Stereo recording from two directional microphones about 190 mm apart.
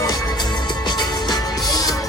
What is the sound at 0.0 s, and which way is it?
Music, 20° left (ahead or behind).